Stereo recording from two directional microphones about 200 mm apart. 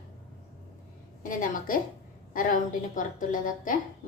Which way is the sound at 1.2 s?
40° left (ahead or behind).